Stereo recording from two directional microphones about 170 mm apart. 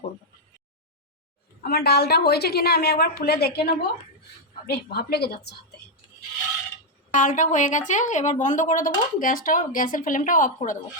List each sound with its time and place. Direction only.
1.6 s a woman's voice: 65° left (ahead or behind)
7.1 s a woman's voice: 50° left (ahead or behind)